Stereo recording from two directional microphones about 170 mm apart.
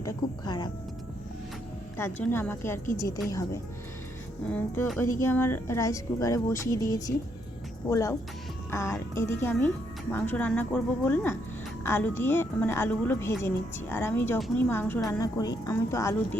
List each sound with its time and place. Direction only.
0.0 s a woman's voice: 20° left (ahead or behind)
2.0 s a woman's voice: 15° left (ahead or behind)